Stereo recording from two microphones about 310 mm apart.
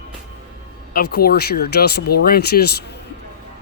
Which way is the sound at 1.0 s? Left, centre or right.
Left.